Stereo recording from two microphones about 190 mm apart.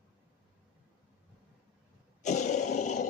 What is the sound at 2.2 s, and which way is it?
Roar, 40° left (ahead or behind).